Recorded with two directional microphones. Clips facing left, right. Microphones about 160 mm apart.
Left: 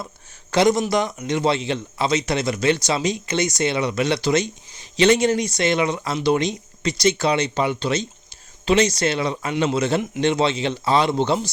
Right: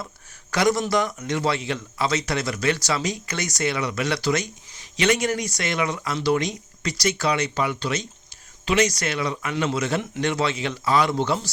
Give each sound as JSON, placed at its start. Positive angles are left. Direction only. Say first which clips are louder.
{"t": 0.5, "sound": "a man's voice", "louder": "left 3 dB", "side_deg": 25}